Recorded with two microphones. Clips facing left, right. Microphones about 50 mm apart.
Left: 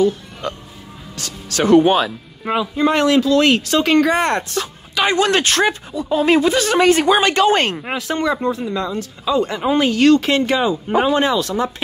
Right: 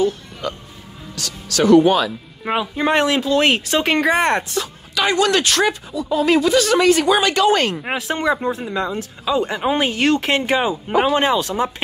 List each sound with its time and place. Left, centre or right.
1.1 s speech: left
2.5 s speech: right
4.9 s speech: left
7.9 s speech: centre